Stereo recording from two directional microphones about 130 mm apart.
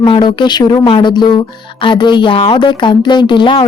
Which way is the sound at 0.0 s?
35° left (ahead or behind).